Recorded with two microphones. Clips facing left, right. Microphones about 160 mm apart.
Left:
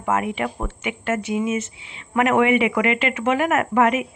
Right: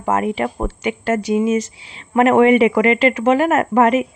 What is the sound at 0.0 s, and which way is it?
A woman's voice, 35° right (ahead or behind).